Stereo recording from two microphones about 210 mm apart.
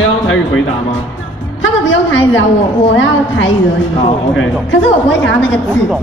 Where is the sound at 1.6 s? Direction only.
60° left (ahead or behind).